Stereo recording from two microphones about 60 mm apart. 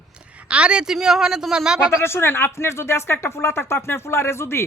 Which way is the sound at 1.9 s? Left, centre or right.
Left.